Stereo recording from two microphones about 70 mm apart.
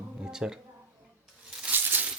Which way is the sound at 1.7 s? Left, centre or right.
Right.